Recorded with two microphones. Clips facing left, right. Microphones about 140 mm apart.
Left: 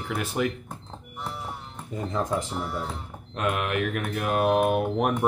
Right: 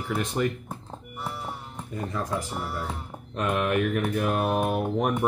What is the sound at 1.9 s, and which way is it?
Speech, 20° left (ahead or behind).